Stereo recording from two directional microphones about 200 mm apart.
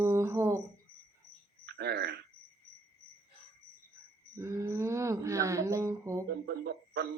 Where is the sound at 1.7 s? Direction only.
55° right (ahead or behind).